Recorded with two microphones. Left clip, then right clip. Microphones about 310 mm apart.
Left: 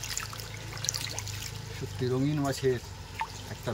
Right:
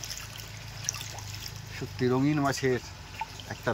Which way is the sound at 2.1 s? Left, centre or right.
Right.